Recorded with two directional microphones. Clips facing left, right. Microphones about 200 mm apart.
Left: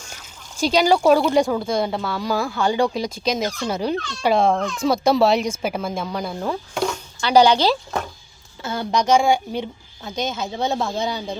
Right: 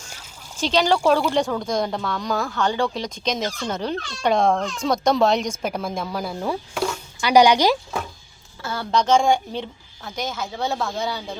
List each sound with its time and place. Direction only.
0.5 s speech: 10° left (ahead or behind); by 7.8 s 15° right (ahead or behind)
8.6 s a woman's voice: 20° left (ahead or behind)